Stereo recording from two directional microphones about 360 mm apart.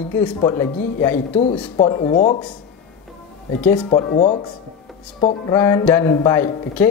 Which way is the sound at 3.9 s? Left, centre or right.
Centre.